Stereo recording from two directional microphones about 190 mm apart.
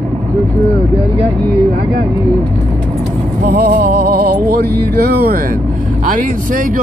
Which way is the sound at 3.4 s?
55° right (ahead or behind).